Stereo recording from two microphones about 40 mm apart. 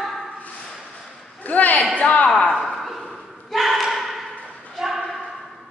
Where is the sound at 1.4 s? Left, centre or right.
Left.